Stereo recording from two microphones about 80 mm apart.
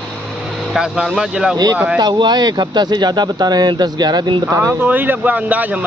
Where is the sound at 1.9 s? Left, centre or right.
Right.